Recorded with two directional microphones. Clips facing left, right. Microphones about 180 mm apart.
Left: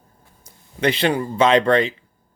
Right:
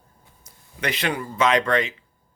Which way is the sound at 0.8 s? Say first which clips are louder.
Left 7 dB; 30° left (ahead or behind).